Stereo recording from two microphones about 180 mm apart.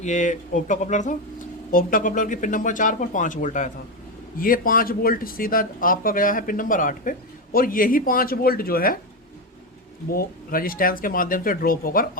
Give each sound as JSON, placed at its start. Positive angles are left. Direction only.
{"t": 0.0, "sound": "speech", "side_deg": 40}
{"t": 10.1, "sound": "speech", "side_deg": 55}